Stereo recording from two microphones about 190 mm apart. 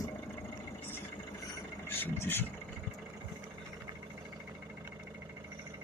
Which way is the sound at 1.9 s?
10° left (ahead or behind).